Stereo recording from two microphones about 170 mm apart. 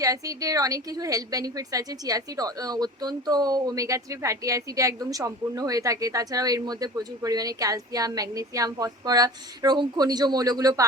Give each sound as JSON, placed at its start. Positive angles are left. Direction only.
{"t": 0.0, "sound": "a woman's voice", "side_deg": -20}